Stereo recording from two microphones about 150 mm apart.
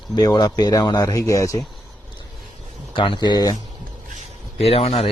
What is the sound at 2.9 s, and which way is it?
Speech, 35° left (ahead or behind).